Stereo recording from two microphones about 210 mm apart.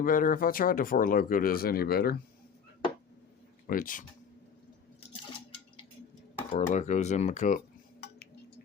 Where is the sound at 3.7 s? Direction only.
40° left (ahead or behind).